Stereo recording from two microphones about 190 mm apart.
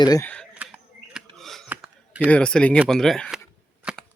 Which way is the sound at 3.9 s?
5° right (ahead or behind).